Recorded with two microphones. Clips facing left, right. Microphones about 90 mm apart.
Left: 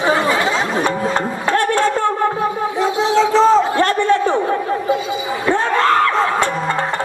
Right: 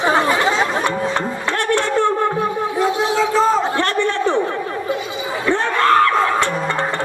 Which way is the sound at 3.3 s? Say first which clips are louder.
Left 5 dB; 20° left (ahead or behind).